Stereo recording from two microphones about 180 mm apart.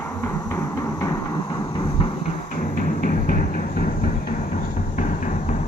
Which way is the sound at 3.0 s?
50° left (ahead or behind).